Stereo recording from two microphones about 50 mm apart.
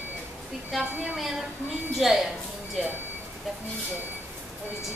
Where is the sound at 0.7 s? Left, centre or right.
Centre.